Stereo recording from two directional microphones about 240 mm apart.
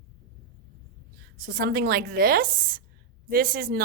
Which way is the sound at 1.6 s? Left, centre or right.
Right.